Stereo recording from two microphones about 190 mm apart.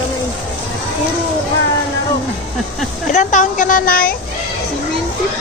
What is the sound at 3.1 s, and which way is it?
Speech, 40° left (ahead or behind).